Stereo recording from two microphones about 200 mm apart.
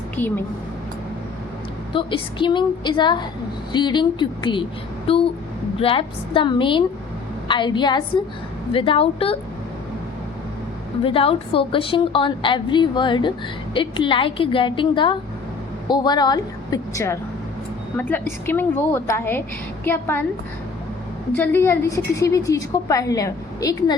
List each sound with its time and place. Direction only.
0.2 s a woman's voice: 10° left (ahead or behind)
1.9 s a woman's voice: 25° left (ahead or behind)
5.0 s a sound: 25° left (ahead or behind)
5.8 s a woman's voice: 25° left (ahead or behind)
11.0 s a woman's voice: 25° left (ahead or behind); by 20.2 s 10° left (ahead or behind)
21.3 s a woman's voice: 10° left (ahead or behind)